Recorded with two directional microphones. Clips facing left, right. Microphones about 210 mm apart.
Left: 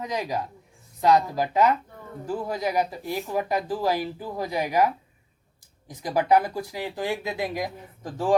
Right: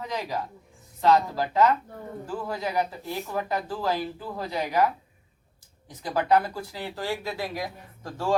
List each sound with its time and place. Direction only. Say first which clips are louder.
0.0 s speech: left 2 dB; 15° left (ahead or behind)
6.0 s speech: left 2 dB; 15° left (ahead or behind)